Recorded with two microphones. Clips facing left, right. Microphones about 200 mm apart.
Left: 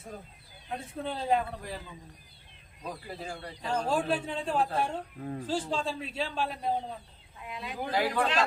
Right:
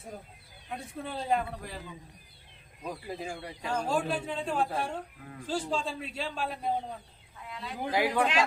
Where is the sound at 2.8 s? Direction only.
15° right (ahead or behind).